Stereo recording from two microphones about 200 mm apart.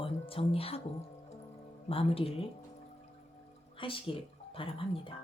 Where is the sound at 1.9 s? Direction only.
30° left (ahead or behind).